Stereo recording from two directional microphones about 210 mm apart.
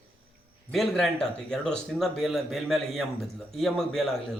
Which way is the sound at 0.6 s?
Centre (ahead or behind).